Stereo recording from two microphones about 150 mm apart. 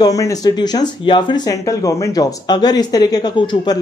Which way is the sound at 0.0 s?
25° left (ahead or behind).